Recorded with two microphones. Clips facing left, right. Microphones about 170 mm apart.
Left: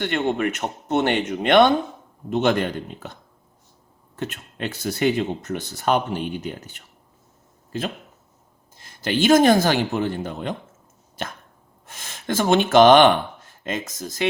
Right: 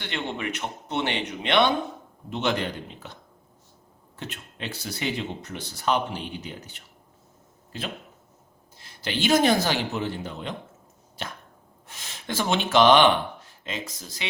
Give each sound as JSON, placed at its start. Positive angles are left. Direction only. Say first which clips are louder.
{"t": 0.0, "sound": "speech", "louder": "left 9 dB", "side_deg": 50}
{"t": 4.2, "sound": "speech", "louder": "left 7 dB", "side_deg": 50}
{"t": 8.8, "sound": "speech", "louder": "left 6 dB", "side_deg": 45}